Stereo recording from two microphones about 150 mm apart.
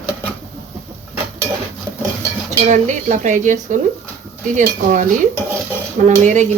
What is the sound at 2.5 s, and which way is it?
A woman's voice, 50° right (ahead or behind).